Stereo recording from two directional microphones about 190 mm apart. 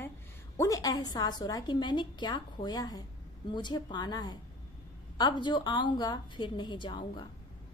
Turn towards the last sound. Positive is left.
turn(degrees=25)  # may be behind; listen again after turning